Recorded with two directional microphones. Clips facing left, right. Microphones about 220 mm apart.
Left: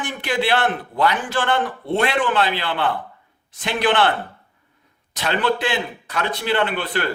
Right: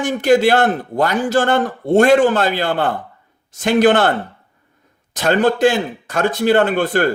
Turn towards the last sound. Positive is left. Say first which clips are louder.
# right 7 dB
turn(degrees=-45)  # may be behind; listen again after turning